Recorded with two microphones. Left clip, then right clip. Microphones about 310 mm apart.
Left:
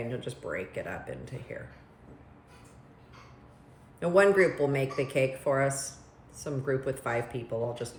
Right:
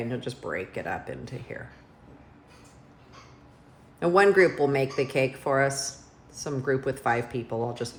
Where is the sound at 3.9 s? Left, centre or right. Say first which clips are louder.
Right 3 dB; right.